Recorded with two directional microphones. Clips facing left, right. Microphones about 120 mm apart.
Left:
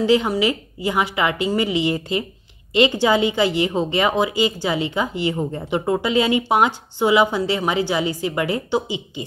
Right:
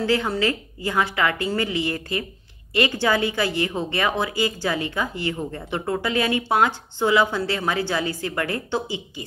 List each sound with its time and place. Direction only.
0.0 s a woman's voice: 15° left (ahead or behind)